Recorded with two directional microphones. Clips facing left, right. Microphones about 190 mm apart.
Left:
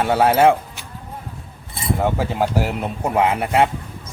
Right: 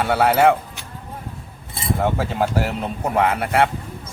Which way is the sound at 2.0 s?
15° left (ahead or behind).